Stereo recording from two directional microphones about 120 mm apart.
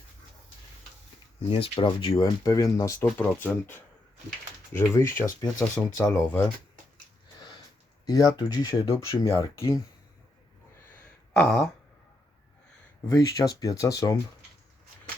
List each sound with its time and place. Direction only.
1.5 s speech: 45° left (ahead or behind); by 3.1 s 25° left (ahead or behind)
3.2 s speech: 15° left (ahead or behind)
8.0 s speech: 30° left (ahead or behind)
11.3 s a sound: 5° left (ahead or behind)
13.1 s speech: 30° left (ahead or behind)